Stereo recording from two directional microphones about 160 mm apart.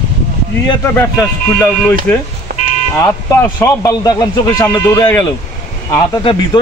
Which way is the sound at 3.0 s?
15° left (ahead or behind).